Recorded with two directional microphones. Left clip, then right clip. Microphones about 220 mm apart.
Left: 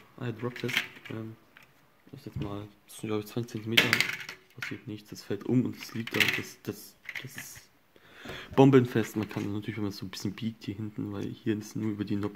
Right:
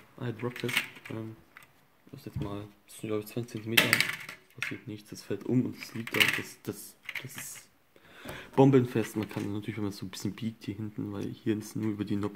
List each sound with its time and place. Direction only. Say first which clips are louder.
0.2 s speech: even; 5° left (ahead or behind)
2.9 s speech: left 1 dB; 15° left (ahead or behind)
3.9 s speech: even; centre (ahead or behind)